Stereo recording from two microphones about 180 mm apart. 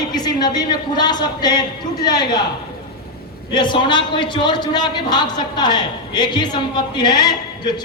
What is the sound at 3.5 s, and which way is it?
A man's voice, 25° left (ahead or behind).